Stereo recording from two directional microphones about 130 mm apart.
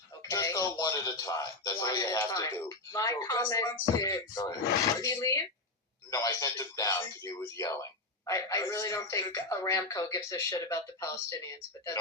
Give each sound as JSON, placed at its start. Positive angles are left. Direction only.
{"t": 0.2, "sound": "speech", "side_deg": 25}